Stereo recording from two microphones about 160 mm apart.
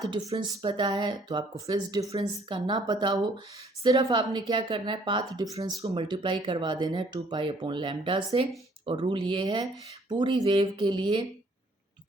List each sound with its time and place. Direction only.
0.1 s speech: 30° right (ahead or behind)